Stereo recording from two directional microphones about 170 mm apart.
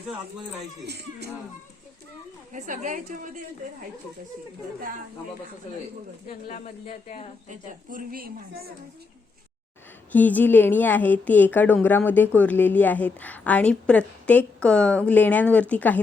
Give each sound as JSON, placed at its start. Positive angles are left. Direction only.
{"t": 0.9, "sound": "speech", "side_deg": -80}
{"t": 2.5, "sound": "a woman's voice", "side_deg": -45}
{"t": 6.2, "sound": "speech", "side_deg": 40}
{"t": 7.4, "sound": "a woman's voice", "side_deg": -50}
{"t": 10.1, "sound": "speech", "side_deg": 10}